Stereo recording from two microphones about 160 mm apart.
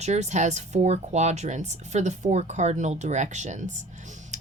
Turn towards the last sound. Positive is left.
turn(degrees=-50)  # may be behind; listen again after turning